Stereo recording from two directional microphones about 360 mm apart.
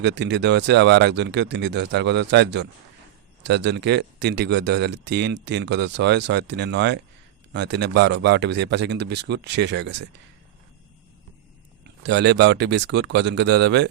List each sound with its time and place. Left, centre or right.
0.0 s speech: right
12.0 s speech: right